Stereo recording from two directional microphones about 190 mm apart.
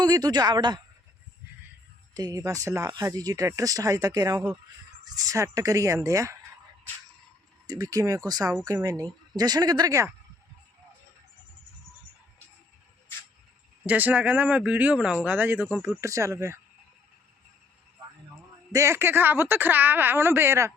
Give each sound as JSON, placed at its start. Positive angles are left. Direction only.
{"t": 0.0, "sound": "speech", "side_deg": -20}
{"t": 2.1, "sound": "speech", "side_deg": -20}
{"t": 7.7, "sound": "speech", "side_deg": -20}
{"t": 13.8, "sound": "speech", "side_deg": -10}
{"t": 18.7, "sound": "speech", "side_deg": -15}